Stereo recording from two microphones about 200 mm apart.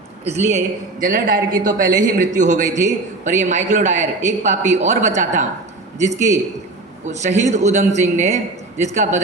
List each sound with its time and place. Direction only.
0.3 s a man's voice: 35° right (ahead or behind)